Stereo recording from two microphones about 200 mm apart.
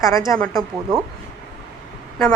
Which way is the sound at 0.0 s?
15° left (ahead or behind).